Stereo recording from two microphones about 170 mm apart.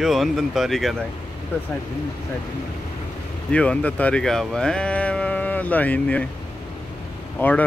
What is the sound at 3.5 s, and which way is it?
Speech, 5° left (ahead or behind).